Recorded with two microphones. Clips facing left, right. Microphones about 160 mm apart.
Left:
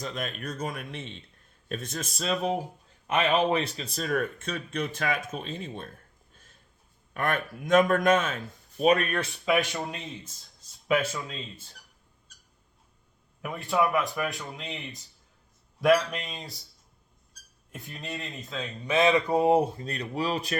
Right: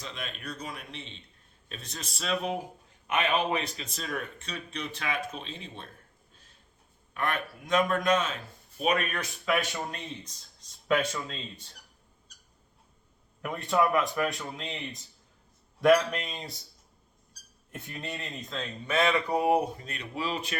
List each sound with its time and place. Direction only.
0.0 s speech: 45° left (ahead or behind)
7.1 s speech: 50° left (ahead or behind)
8.8 s speech: 35° left (ahead or behind)
9.5 s a man's voice: 10° left (ahead or behind)
13.4 s speech: centre (ahead or behind)
17.7 s speech: centre (ahead or behind)
18.9 s speech: 20° left (ahead or behind); by 20.6 s 40° left (ahead or behind)